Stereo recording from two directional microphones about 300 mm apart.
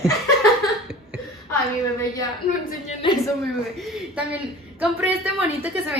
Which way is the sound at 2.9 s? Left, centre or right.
Centre.